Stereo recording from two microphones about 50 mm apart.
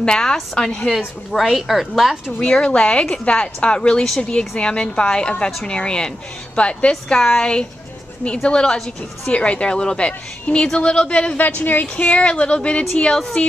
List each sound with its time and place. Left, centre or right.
0.0 s a woman's voice: centre
0.9 s a woman's voice: centre
2.4 s a woman's voice: centre
11.3 s a woman's voice: left